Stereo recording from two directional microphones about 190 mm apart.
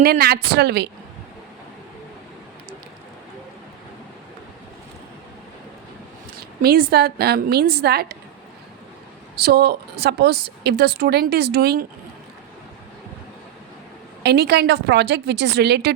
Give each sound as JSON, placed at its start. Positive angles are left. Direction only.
{"t": 0.0, "sound": "a woman's voice", "side_deg": -55}
{"t": 6.6, "sound": "a woman's voice", "side_deg": -55}
{"t": 9.4, "sound": "a woman's voice", "side_deg": -55}
{"t": 14.3, "sound": "a woman's voice", "side_deg": -60}